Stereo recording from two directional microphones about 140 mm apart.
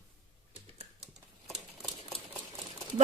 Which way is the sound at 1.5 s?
Centre (ahead or behind).